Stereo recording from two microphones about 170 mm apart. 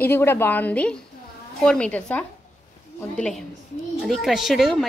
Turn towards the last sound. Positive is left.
turn(degrees=0)  # may be behind; listen again after turning